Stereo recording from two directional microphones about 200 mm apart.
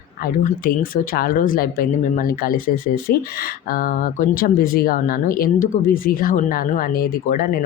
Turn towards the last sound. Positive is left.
turn(degrees=45)  # may be behind; listen again after turning